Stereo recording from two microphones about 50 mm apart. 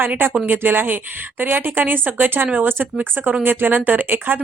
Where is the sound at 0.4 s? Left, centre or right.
Right.